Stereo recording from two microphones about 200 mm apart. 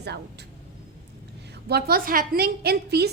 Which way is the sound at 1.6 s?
50° right (ahead or behind).